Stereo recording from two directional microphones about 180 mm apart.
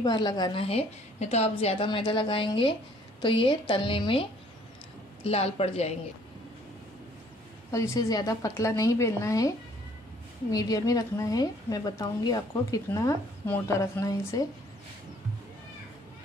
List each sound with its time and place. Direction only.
0.0 s a woman's voice: 20° left (ahead or behind)
7.7 s a woman's voice: 15° left (ahead or behind)
10.5 s a woman's voice: 20° left (ahead or behind)